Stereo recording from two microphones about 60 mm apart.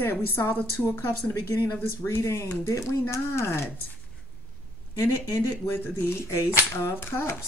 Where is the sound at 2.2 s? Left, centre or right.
Left.